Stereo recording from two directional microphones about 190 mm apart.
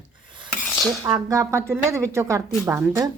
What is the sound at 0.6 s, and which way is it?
Dishes, 5° left (ahead or behind).